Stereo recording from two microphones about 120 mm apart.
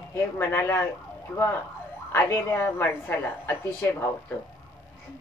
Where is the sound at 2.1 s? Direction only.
20° left (ahead or behind).